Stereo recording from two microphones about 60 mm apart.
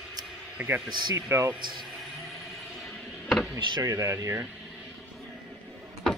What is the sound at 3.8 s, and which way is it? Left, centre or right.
Speech, right.